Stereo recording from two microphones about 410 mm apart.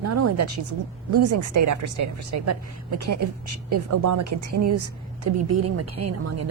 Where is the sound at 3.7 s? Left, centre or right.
Right.